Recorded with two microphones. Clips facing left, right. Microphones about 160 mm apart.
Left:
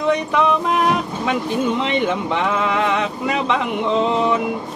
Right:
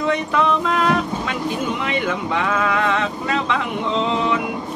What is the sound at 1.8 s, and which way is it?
Speech, 25° left (ahead or behind).